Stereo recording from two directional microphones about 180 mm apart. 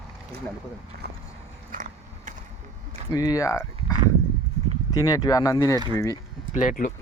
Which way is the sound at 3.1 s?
20° left (ahead or behind).